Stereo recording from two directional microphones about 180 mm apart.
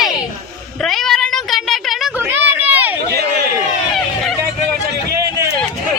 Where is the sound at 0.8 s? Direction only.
Centre (ahead or behind).